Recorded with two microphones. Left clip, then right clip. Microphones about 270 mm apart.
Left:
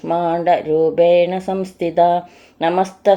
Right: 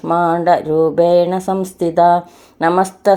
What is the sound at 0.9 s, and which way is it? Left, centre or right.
A woman's voice, right.